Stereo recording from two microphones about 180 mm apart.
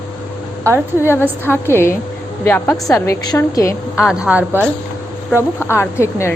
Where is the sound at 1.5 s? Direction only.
15° left (ahead or behind).